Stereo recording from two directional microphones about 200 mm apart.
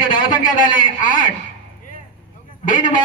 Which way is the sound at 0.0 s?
45° left (ahead or behind).